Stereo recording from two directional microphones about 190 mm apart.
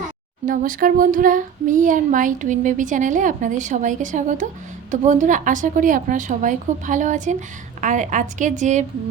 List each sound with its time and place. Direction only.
0.4 s child singing: 45° right (ahead or behind)
4.9 s a woman's voice: 40° right (ahead or behind)